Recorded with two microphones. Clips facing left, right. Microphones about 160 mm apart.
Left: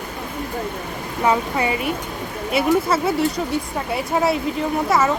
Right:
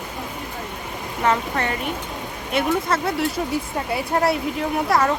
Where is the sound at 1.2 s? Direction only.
10° left (ahead or behind).